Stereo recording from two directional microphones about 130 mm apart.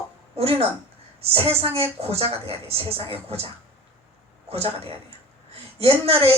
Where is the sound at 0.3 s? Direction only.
50° right (ahead or behind).